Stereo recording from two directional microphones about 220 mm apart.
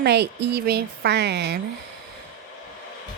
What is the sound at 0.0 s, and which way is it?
A woman's voice, 50° right (ahead or behind).